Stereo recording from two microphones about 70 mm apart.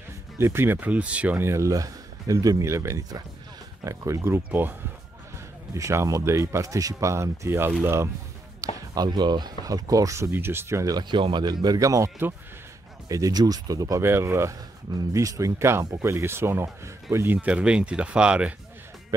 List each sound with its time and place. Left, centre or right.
0.4 s speech: right; by 1.4 s centre
1.4 s speech: right
4.5 s speech: right
5.8 s speech: right
8.5 s speech: right
10.3 s speech: right
11.0 s speech: right
11.8 s speech: right
13.1 s speech: right
14.0 s speech: right
17.3 s speech: centre